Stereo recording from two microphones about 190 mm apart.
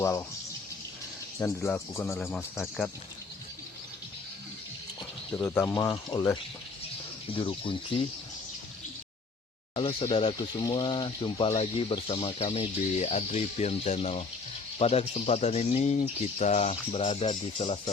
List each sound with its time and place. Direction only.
0.0 s speech: 15° left (ahead or behind)
1.6 s speech: 10° left (ahead or behind)
5.3 s speech: 10° left (ahead or behind); by 7.8 s 25° left (ahead or behind)
9.7 s speech: 30° left (ahead or behind)